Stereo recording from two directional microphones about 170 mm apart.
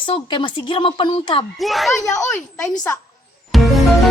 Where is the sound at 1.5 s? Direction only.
Centre (ahead or behind).